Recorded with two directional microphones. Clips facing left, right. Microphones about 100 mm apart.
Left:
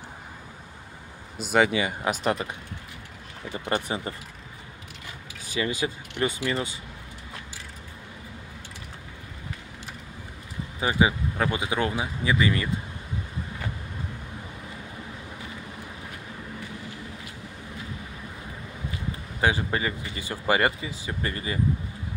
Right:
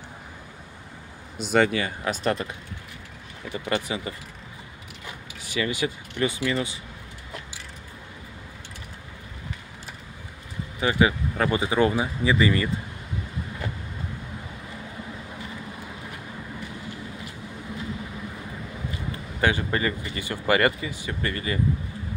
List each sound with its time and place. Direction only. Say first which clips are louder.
1.4 s speech: right 1 dB; 5° left (ahead or behind)
1.7 s speech: left 1 dB; 15° left (ahead or behind)
3.5 s speech: right 1 dB; 30° left (ahead or behind)
5.5 s speech: right 1 dB; 35° left (ahead or behind)
10.8 s speech: right 1 dB; 20° left (ahead or behind)
11.3 s speech: right 4 dB; centre (ahead or behind)
19.4 s speech: right 1 dB; 10° left (ahead or behind)